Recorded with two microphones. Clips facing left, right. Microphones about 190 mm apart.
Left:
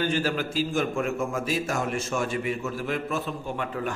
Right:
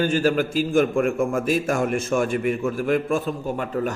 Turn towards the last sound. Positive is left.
turn(degrees=-40)  # may be behind; listen again after turning